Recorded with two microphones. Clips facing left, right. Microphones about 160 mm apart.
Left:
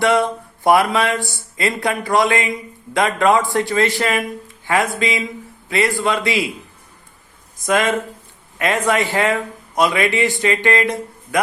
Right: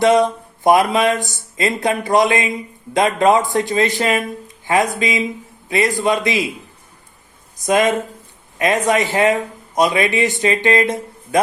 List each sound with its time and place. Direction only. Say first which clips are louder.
0.0 s speech: right 3 dB; 20° right (ahead or behind)
7.6 s speech: right 2 dB; 20° right (ahead or behind)